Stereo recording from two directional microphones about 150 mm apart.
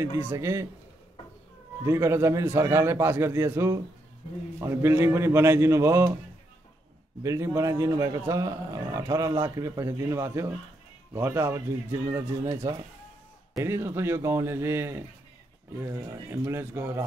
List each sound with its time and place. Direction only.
0.2 s a man's voice: 20° right (ahead or behind)
1.9 s a man's voice: 20° right (ahead or behind)
7.2 s a man's voice: 20° right (ahead or behind)